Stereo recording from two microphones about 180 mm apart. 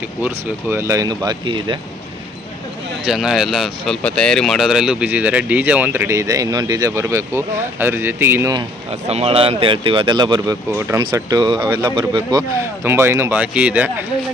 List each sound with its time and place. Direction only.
0.2 s speech: 15° right (ahead or behind)
3.1 s speech: 5° right (ahead or behind)
8.9 s speech: 35° right (ahead or behind); by 11.0 s 15° right (ahead or behind)
11.0 s speech: 25° right (ahead or behind)